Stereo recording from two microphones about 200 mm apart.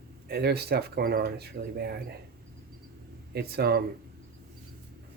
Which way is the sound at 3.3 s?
55° right (ahead or behind).